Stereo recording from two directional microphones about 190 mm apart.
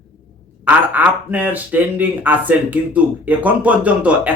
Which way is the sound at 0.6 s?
10° right (ahead or behind).